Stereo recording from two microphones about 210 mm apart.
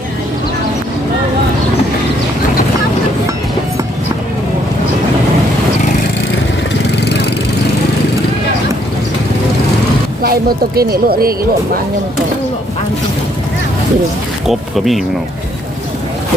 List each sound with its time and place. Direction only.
10.8 s speech: 45° right (ahead or behind)
14.4 s speech: centre (ahead or behind)